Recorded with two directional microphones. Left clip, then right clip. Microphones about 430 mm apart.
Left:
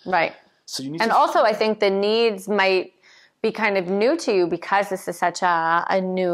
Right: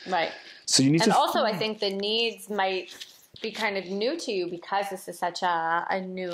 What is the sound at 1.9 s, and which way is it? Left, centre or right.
A woman's voice, left.